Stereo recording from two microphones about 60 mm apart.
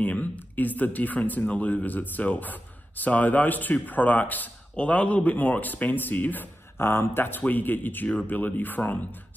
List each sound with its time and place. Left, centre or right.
0.0 s speech: left